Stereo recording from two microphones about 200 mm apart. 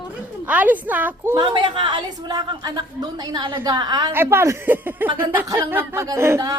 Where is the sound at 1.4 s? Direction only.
25° right (ahead or behind).